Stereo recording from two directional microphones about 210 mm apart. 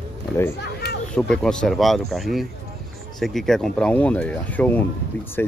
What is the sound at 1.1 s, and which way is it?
Speech, 5° left (ahead or behind).